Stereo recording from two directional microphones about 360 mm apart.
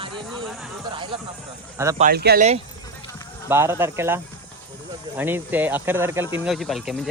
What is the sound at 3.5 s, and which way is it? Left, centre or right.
Speech, centre.